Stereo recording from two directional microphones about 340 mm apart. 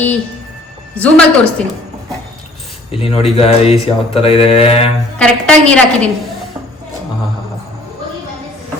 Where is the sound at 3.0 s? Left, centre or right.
Centre.